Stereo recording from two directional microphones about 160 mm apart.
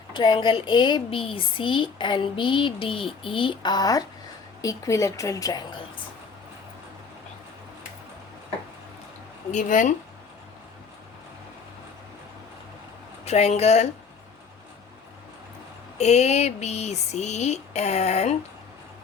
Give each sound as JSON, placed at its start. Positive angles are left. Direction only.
{"t": 0.1, "sound": "a woman's voice", "side_deg": 30}
{"t": 9.5, "sound": "speech", "side_deg": 50}
{"t": 13.2, "sound": "speech", "side_deg": 40}
{"t": 16.0, "sound": "speech", "side_deg": 45}